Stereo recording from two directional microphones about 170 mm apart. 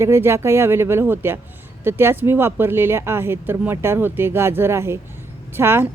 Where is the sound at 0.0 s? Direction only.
15° right (ahead or behind).